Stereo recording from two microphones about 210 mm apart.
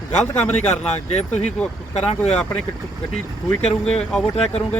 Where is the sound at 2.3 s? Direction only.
5° left (ahead or behind).